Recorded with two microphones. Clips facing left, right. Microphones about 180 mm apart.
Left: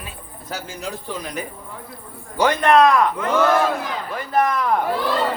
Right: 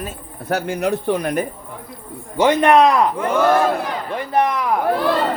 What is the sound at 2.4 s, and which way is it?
Speech, 20° right (ahead or behind).